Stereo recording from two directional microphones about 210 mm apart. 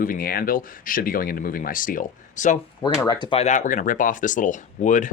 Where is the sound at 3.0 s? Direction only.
20° left (ahead or behind).